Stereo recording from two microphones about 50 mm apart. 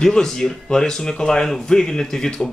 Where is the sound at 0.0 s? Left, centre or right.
Centre.